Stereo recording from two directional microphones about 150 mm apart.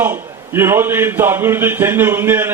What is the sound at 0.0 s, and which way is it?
A man's voice, 15° right (ahead or behind).